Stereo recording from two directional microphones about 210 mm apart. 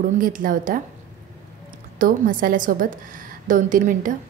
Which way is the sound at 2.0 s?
40° right (ahead or behind).